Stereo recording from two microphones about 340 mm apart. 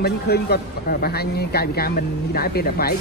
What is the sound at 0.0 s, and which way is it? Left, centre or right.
Speech, left.